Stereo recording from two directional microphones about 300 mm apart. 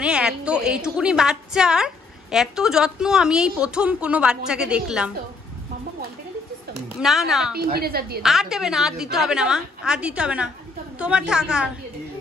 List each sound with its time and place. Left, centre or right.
0.0 s a woman's voice: centre
7.0 s a woman's voice: centre
7.5 s a woman's voice: right
8.2 s a woman's voice: centre